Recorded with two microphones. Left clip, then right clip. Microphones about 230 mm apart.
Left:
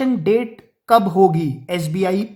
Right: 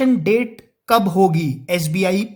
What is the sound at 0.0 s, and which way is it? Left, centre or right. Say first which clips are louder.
A woman's voice: right 1 dB; right.